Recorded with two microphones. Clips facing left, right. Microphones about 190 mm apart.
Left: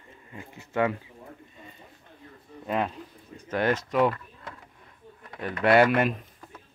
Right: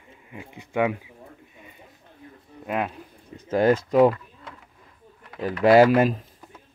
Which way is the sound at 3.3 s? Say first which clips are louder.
Right 6 dB; 25° right (ahead or behind).